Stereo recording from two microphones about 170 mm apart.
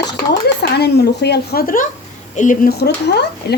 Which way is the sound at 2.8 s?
75° left (ahead or behind).